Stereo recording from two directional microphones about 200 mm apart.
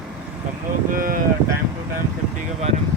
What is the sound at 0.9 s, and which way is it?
Speech, 45° right (ahead or behind).